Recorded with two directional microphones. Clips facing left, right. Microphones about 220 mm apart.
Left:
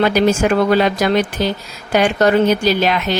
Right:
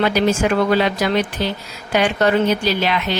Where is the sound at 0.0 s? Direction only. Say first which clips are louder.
Left 3 dB; 45° left (ahead or behind).